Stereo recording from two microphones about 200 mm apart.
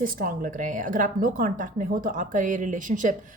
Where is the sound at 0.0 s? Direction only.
45° right (ahead or behind).